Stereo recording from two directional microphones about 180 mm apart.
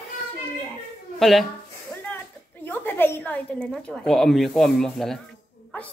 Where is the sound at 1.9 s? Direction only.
15° left (ahead or behind).